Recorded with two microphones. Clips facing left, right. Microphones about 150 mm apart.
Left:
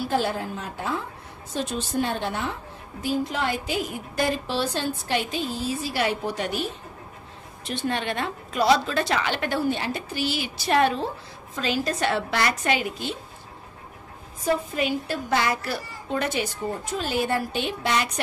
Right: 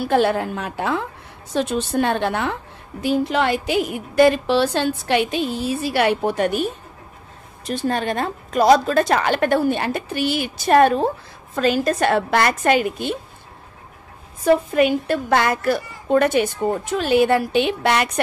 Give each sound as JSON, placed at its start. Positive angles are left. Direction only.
{"t": 0.0, "sound": "a woman's voice", "side_deg": -65}
{"t": 7.6, "sound": "a woman's voice", "side_deg": -40}
{"t": 14.4, "sound": "a woman's voice", "side_deg": -60}
{"t": 16.9, "sound": "a woman's voice", "side_deg": -70}